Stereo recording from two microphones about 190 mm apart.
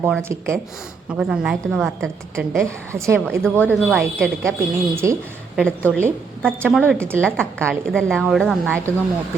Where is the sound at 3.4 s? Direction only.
5° left (ahead or behind).